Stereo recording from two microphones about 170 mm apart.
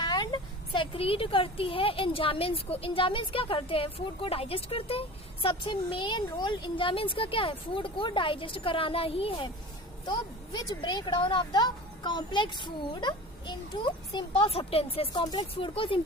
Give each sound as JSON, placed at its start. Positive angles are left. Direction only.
{"t": 0.0, "sound": "speech", "side_deg": 25}